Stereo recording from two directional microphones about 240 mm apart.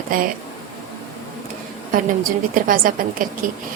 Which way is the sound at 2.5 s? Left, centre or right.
Right.